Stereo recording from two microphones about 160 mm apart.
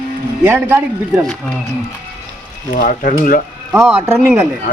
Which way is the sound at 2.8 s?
60° left (ahead or behind).